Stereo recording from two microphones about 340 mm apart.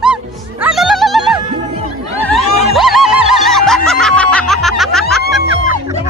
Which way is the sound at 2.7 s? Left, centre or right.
Centre.